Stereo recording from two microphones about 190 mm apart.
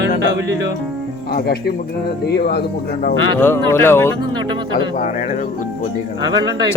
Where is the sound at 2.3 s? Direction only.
60° left (ahead or behind).